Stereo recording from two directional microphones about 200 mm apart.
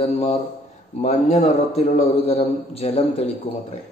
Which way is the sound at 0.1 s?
35° left (ahead or behind).